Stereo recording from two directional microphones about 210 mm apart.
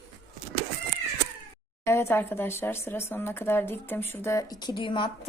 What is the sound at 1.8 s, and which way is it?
Speech, 10° left (ahead or behind).